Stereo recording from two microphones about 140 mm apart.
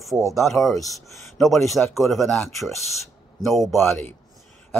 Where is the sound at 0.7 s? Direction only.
25° left (ahead or behind).